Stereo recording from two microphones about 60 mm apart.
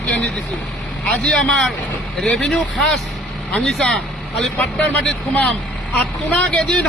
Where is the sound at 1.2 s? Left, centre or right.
Centre.